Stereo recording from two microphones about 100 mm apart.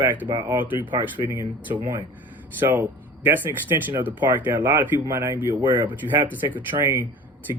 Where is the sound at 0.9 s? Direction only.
20° right (ahead or behind).